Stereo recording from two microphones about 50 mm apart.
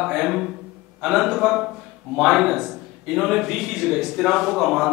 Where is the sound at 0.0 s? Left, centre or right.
Centre.